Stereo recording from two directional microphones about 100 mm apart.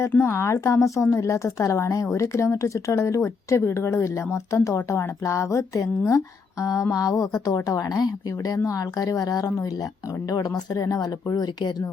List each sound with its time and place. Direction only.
0.1 s speech: 25° left (ahead or behind); by 11.7 s 45° left (ahead or behind)